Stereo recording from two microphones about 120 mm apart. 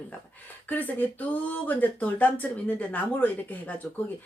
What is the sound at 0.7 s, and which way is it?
Speech, 15° left (ahead or behind).